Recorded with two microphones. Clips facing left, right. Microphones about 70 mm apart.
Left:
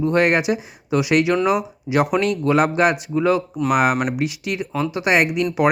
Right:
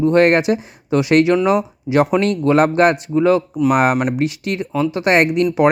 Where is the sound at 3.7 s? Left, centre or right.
Right.